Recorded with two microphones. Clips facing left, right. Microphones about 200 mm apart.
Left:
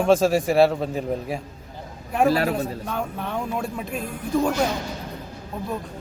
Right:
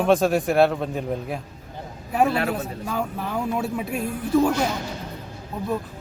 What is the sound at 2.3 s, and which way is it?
Speech, 35° left (ahead or behind).